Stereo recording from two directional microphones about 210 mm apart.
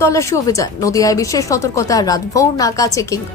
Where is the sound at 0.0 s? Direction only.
15° left (ahead or behind).